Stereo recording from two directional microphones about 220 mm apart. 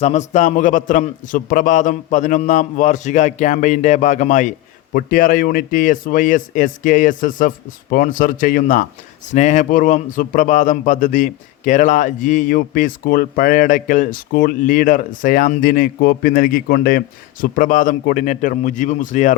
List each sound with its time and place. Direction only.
0.0 s speech: 30° left (ahead or behind)